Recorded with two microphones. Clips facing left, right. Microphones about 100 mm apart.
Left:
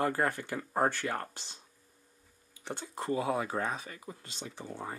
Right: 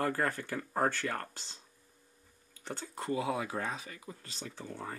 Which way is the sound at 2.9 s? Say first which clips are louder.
Left 2 dB; 30° left (ahead or behind).